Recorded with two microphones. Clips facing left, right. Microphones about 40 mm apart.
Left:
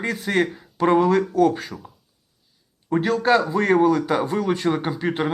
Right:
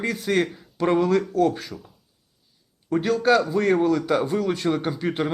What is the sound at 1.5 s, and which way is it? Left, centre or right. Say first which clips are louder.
Speech: left 2 dB; centre.